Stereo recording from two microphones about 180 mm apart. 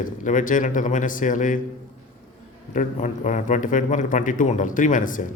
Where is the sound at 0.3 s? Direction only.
45° left (ahead or behind).